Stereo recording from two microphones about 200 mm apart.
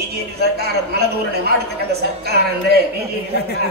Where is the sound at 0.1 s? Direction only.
55° right (ahead or behind).